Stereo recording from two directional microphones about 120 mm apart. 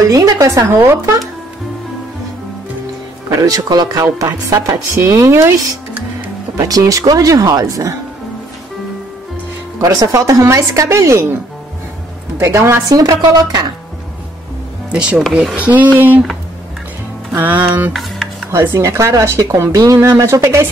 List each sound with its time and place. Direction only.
0.1 s speech: 30° right (ahead or behind)
3.3 s speech: 30° right (ahead or behind)
9.8 s speech: 30° right (ahead or behind)
12.4 s speech: 25° right (ahead or behind)
14.9 s speech: 10° right (ahead or behind)
17.3 s speech: 15° right (ahead or behind)
17.9 s music: centre (ahead or behind)
18.5 s speech: 20° right (ahead or behind)